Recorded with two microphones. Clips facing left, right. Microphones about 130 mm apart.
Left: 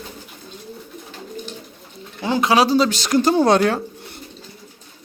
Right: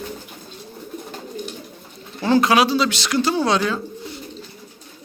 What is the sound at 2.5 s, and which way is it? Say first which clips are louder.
Speech: left 2 dB; 40° left (ahead or behind).